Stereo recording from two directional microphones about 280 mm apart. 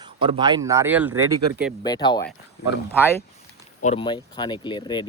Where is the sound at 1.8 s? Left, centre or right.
Centre.